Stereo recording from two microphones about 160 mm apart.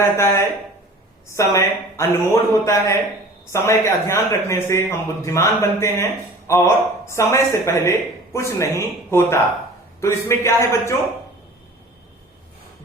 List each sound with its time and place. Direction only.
0.0 s a man's voice: 15° left (ahead or behind)